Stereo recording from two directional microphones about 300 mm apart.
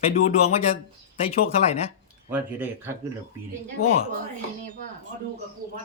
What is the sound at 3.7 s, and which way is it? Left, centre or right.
Speech, left.